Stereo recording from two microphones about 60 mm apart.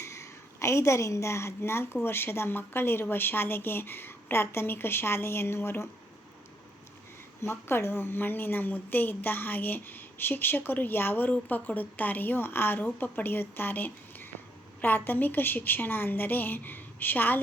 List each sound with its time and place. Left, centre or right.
0.0 s a woman's voice: left
7.4 s a woman's voice: left